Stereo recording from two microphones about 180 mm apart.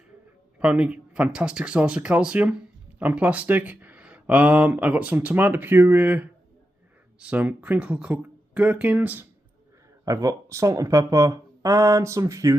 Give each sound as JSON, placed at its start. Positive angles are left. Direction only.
{"t": 0.6, "sound": "speech", "side_deg": -5}